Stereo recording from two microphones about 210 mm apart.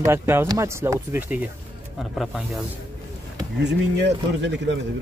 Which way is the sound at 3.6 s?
55° right (ahead or behind).